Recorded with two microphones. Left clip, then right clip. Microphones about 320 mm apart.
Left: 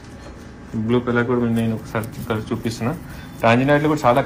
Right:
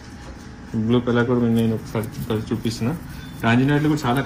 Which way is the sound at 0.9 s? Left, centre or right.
Left.